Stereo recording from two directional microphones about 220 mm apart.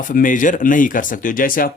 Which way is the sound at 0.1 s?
35° left (ahead or behind).